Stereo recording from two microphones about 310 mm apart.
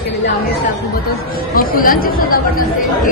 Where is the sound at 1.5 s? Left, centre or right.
Left.